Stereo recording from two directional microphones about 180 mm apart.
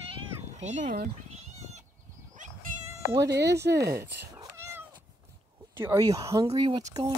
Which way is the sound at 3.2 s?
70° right (ahead or behind).